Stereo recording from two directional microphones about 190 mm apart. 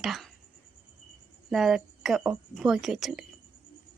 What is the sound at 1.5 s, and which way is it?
A woman's voice, centre (ahead or behind).